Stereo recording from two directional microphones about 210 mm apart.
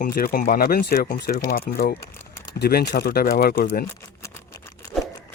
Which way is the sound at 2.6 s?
50° left (ahead or behind).